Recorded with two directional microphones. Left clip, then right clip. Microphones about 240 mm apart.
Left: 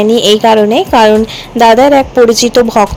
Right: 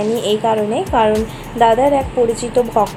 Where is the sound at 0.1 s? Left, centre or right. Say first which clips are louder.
Left 10 dB; left.